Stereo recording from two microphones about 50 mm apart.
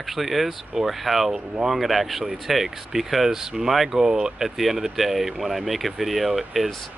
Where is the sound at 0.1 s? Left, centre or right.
Centre.